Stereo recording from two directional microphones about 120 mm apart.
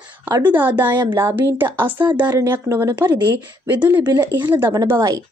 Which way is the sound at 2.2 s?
35° right (ahead or behind).